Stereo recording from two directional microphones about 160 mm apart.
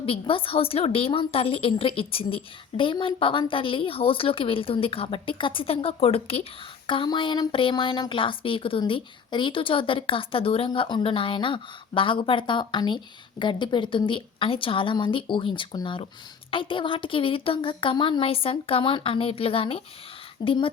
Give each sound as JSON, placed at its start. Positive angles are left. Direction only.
{"t": 0.0, "sound": "a woman's voice", "side_deg": 35}